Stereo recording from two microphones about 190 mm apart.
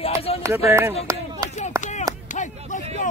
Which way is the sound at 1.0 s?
20° right (ahead or behind).